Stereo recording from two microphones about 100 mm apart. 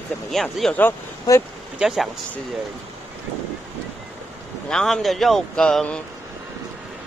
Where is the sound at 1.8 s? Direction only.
5° right (ahead or behind).